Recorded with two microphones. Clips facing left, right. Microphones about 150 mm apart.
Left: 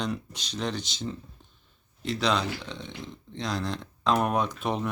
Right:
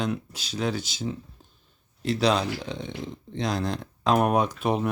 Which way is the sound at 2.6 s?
45° right (ahead or behind).